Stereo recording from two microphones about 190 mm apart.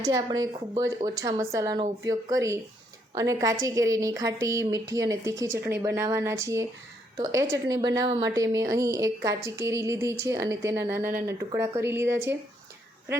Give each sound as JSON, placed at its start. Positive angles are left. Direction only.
{"t": 0.0, "sound": "a woman's voice", "side_deg": -20}